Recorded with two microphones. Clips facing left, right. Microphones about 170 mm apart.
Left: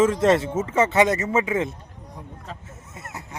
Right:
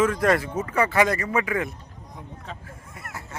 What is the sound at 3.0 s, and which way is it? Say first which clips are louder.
Speech: left 1 dB; 20° left (ahead or behind).